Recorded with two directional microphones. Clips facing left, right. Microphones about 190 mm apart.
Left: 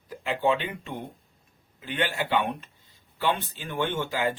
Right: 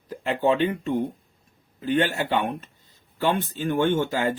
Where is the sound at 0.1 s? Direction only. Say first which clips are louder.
Right 3 dB; 40° right (ahead or behind).